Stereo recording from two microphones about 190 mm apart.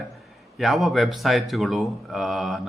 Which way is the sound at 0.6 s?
Centre (ahead or behind).